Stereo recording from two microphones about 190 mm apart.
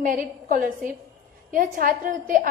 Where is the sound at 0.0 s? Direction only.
45° right (ahead or behind).